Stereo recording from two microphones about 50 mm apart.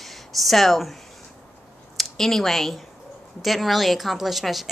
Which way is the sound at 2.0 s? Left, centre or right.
Centre.